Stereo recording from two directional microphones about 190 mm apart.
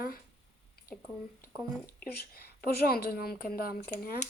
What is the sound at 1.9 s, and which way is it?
A woman's voice, 50° left (ahead or behind).